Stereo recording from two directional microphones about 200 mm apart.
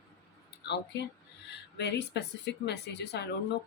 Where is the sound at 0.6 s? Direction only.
60° left (ahead or behind).